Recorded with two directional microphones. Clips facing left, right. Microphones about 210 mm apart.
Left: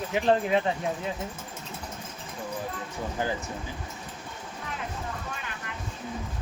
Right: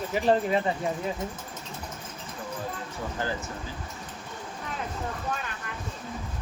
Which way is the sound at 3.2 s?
20° left (ahead or behind).